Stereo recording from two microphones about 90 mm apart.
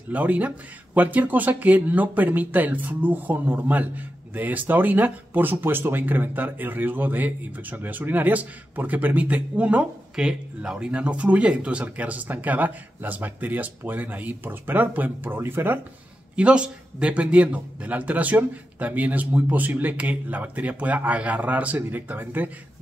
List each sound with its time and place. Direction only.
0.1 s a man's voice: 20° right (ahead or behind)
16.3 s a man's voice: 10° right (ahead or behind)